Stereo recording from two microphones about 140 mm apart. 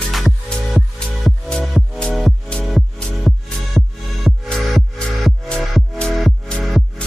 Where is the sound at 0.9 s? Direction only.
5° left (ahead or behind).